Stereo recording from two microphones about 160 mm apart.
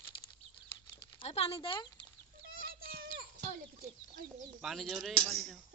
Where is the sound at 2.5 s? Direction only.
65° right (ahead or behind).